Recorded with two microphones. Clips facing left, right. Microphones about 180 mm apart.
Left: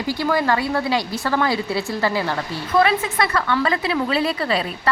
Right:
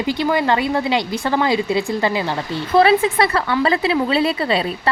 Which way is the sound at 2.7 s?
30° right (ahead or behind).